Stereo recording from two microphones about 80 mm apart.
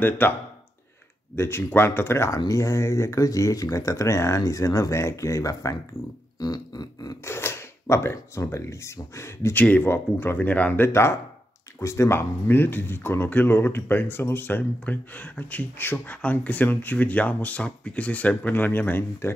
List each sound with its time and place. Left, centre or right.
0.2 s speech: left
6.4 s a sound: left
7.2 s speech: left
9.6 s speech: left